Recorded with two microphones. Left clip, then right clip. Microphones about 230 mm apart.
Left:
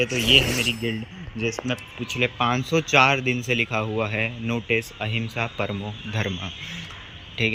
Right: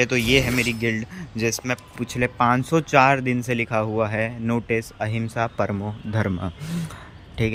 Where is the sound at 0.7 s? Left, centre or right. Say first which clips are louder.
Right 2 dB; centre.